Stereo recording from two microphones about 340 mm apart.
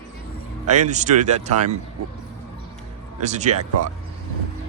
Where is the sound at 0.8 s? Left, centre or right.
Right.